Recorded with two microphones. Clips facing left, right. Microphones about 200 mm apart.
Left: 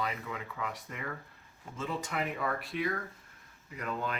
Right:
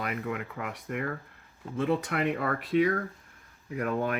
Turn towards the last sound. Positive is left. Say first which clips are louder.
# right 7 dB
turn(degrees=-55)  # may be behind; listen again after turning